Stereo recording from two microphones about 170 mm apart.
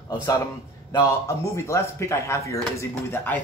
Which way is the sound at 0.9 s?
20° left (ahead or behind).